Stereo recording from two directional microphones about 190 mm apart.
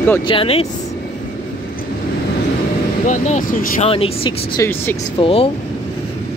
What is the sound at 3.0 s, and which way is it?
Speech, 40° left (ahead or behind).